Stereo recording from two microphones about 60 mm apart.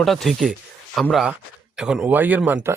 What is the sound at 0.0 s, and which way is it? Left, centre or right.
Speech, centre.